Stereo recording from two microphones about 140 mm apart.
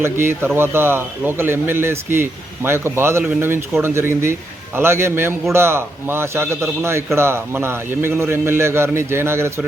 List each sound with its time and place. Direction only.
0.0 s speech: 15° right (ahead or behind)